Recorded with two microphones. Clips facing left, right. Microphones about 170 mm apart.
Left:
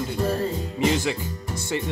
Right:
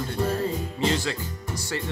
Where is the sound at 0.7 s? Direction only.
15° left (ahead or behind).